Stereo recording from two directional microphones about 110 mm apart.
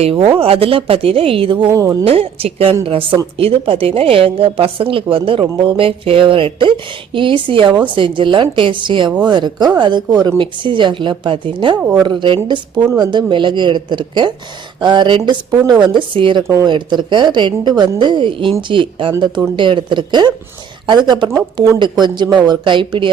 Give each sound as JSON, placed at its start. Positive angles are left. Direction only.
{"t": 0.0, "sound": "a woman's voice", "side_deg": -55}
{"t": 1.7, "sound": "speech", "side_deg": -30}
{"t": 2.0, "sound": "a woman's voice", "side_deg": -60}